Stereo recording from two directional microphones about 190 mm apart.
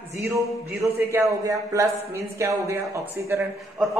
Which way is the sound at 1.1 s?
15° right (ahead or behind).